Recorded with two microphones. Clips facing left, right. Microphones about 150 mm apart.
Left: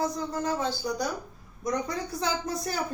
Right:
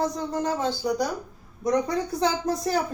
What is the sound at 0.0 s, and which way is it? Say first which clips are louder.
Speech: right 3 dB; 25° right (ahead or behind).